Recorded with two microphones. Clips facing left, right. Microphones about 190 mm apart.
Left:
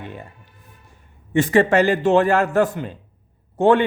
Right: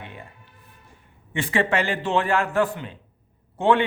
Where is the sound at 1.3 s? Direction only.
45° left (ahead or behind).